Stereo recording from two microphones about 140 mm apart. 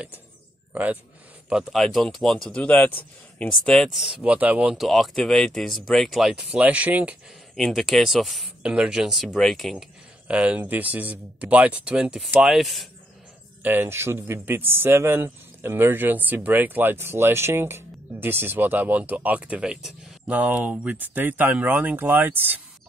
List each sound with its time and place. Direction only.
1.5 s speech: centre (ahead or behind)
7.5 s speech: centre (ahead or behind)
10.2 s speech: 10° right (ahead or behind)
13.6 s speech: 15° right (ahead or behind)